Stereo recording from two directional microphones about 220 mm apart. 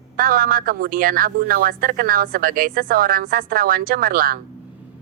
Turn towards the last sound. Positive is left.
turn(degrees=-40)  # may be behind; listen again after turning